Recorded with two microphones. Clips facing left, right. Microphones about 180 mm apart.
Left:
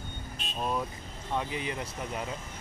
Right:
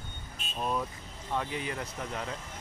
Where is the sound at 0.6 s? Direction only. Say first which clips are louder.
Even; 10° left (ahead or behind).